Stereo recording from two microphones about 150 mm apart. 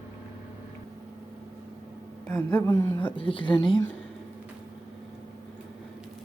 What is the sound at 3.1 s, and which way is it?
Speech, 35° left (ahead or behind).